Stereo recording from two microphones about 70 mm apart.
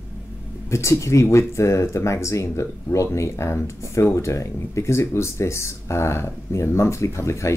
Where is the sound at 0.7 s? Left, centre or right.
Left.